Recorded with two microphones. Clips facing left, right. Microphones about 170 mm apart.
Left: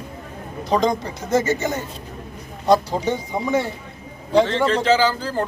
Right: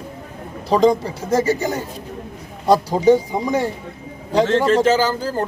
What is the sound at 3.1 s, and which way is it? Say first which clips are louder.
A man's voice: right 8 dB; 35° right (ahead or behind).